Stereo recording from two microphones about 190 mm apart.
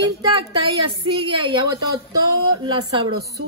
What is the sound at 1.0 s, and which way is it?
Speech, 25° right (ahead or behind).